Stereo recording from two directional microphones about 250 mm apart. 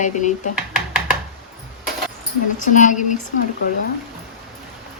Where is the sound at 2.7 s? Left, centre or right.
Left.